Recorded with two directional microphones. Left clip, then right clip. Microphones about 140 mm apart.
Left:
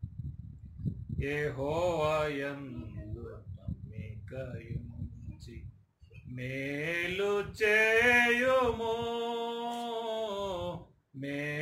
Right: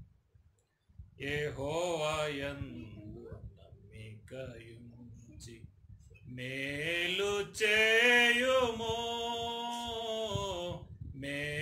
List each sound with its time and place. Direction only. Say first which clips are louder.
1.2 s mantra: left 3 dB; 10° right (ahead or behind)
6.3 s mantra: left 1 dB; 10° right (ahead or behind)
10.0 s a sound: even; 15° right (ahead or behind)